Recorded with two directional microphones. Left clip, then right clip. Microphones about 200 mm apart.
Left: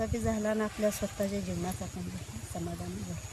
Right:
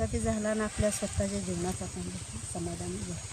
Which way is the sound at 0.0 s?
5° left (ahead or behind).